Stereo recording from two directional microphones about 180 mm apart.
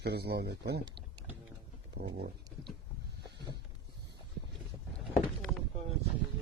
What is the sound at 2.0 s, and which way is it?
Speech, 50° right (ahead or behind).